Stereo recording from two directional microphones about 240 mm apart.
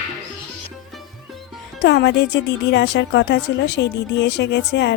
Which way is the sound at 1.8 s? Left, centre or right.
Left.